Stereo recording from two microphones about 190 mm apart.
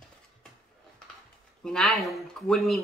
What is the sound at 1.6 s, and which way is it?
Speech, centre (ahead or behind).